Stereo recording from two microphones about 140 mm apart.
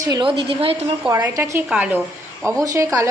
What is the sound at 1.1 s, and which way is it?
Speech, 20° right (ahead or behind).